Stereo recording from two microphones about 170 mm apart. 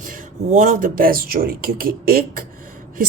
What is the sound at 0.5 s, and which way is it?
A woman's voice, 50° right (ahead or behind).